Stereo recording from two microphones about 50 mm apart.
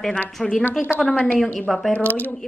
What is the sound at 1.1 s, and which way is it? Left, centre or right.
Speech, left.